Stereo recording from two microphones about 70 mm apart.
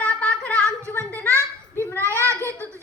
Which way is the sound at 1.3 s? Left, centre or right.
Left.